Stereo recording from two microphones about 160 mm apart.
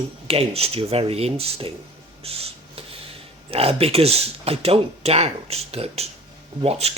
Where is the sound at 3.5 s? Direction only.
40° right (ahead or behind).